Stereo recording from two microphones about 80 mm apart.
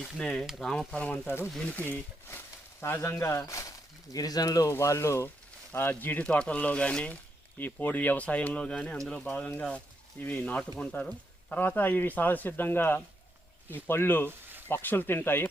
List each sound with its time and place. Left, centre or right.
0.2 s speech: centre
0.9 s speech: centre; by 4.7 s left
4.7 s speech: left
6.2 s speech: centre; by 15.4 s left